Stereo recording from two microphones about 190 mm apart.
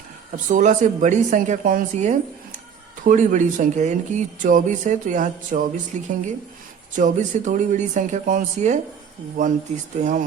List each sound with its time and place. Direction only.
0.4 s speech: 40° right (ahead or behind)
10.0 s speech: 40° right (ahead or behind)